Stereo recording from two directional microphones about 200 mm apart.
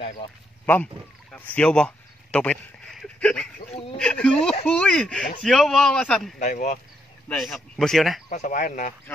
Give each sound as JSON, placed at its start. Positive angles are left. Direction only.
{"t": 1.3, "sound": "speech", "side_deg": 5}
{"t": 6.4, "sound": "speech", "side_deg": 40}
{"t": 7.2, "sound": "speech", "side_deg": 0}
{"t": 8.3, "sound": "speech", "side_deg": 40}